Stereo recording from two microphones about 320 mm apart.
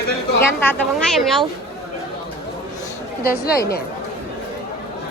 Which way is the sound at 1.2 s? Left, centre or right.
Centre.